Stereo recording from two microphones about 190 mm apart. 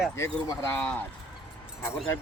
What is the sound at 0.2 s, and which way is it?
Speech, 15° left (ahead or behind).